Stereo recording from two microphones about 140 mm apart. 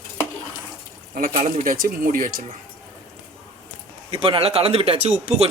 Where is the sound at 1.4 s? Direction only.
80° right.